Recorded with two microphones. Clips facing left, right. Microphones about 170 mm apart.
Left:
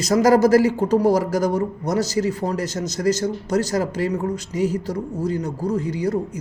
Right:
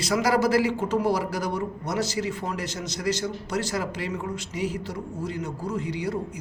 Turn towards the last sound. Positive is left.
turn(degrees=40)  # may be behind; listen again after turning